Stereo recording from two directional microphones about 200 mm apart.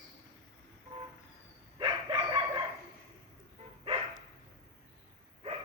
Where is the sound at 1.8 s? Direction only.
20° right (ahead or behind).